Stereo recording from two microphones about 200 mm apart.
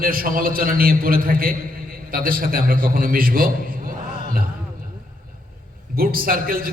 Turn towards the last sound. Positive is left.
turn(degrees=-45)  # may be behind; listen again after turning